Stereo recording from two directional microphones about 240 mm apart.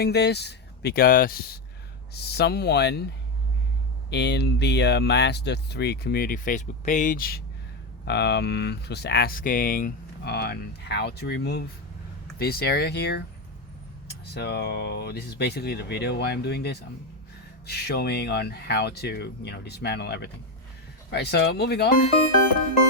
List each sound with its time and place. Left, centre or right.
0.0 s speech: left
4.1 s speech: left